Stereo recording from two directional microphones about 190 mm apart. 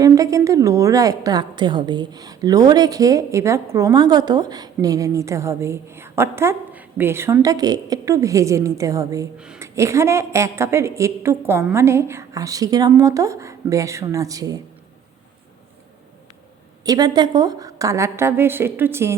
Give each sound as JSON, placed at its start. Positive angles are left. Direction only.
{"t": 0.0, "sound": "a woman's voice", "side_deg": -15}
{"t": 16.8, "sound": "a woman's voice", "side_deg": -20}